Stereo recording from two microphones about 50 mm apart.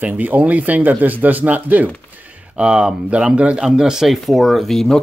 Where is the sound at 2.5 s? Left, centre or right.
Centre.